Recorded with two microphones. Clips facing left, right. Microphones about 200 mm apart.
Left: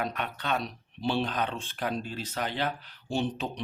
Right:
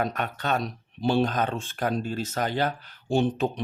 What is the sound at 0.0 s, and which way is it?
Speech, 45° right (ahead or behind).